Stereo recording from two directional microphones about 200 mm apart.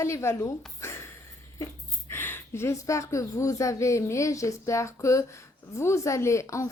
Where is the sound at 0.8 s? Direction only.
15° left (ahead or behind).